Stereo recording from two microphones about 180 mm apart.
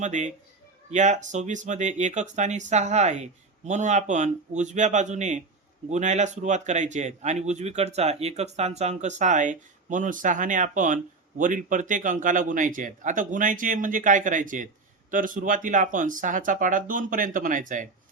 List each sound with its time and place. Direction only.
0.0 s speech: 40° right (ahead or behind)